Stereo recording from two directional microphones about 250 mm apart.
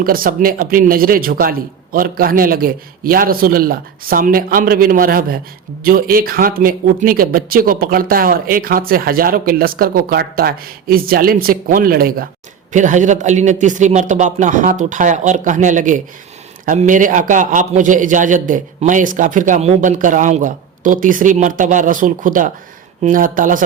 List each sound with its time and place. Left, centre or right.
0.0 s a man's voice: right